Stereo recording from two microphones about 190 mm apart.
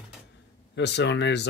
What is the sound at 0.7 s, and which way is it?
Speech, 65° left (ahead or behind).